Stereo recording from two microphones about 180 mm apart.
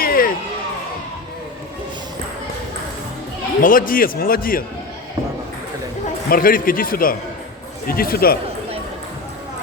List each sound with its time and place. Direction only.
0.0 s music: 55° left (ahead or behind)
3.6 s a man's voice: 50° left (ahead or behind)
6.3 s a man's voice: 50° left (ahead or behind)